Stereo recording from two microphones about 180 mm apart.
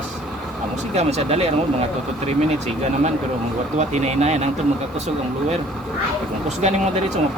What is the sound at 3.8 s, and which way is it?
Speech, 40° right (ahead or behind).